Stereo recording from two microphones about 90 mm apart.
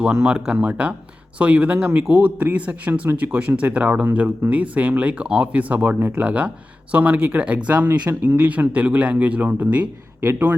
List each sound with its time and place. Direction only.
0.0 s speech: 10° right (ahead or behind)